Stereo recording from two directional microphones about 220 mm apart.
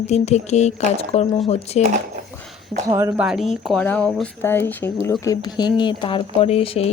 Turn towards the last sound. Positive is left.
turn(degrees=30)  # may be behind; listen again after turning